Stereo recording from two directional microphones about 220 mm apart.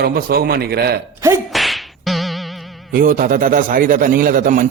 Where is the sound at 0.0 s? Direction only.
45° right (ahead or behind).